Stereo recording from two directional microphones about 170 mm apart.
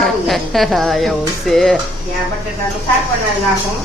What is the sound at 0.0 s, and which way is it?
A woman's voice, centre (ahead or behind).